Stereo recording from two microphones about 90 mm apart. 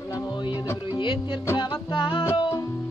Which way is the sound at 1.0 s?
65° left (ahead or behind).